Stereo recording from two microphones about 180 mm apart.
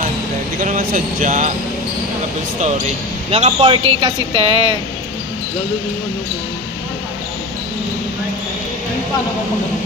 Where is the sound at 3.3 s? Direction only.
30° right (ahead or behind).